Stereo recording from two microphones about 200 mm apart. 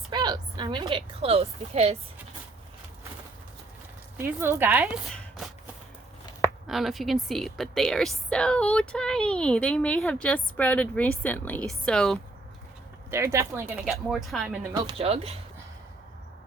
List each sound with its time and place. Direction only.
0.1 s a woman's voice: 20° right (ahead or behind)
4.2 s speech: 10° right (ahead or behind)
5.0 s a sound: centre (ahead or behind)
6.7 s a woman's voice: centre (ahead or behind)
13.1 s speech: 15° right (ahead or behind)
13.8 s a woman's voice: centre (ahead or behind)
14.7 s speech: 25° right (ahead or behind)